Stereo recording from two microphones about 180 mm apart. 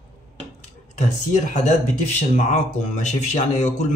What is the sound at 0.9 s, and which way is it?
Speech, 40° left (ahead or behind).